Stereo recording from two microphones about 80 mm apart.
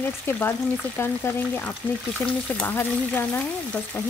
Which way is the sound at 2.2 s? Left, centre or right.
Centre.